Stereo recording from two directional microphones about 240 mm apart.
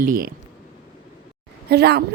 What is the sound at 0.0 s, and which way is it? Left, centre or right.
Speech, right.